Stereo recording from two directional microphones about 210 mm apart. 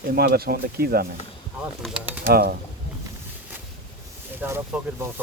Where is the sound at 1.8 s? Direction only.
5° right (ahead or behind).